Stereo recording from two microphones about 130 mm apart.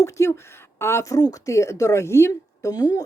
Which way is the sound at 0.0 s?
20° left (ahead or behind).